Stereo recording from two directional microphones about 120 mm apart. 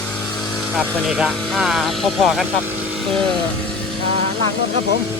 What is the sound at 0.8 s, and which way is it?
Speech, 5° right (ahead or behind).